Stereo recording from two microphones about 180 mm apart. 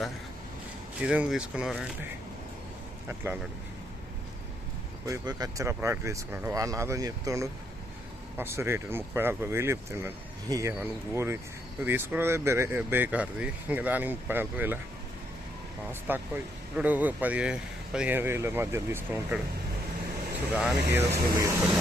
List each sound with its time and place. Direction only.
1.0 s speech: 5° right (ahead or behind)
5.0 s speech: 20° right (ahead or behind)
15.9 s speech: 10° right (ahead or behind)
20.5 s speech: 10° right (ahead or behind)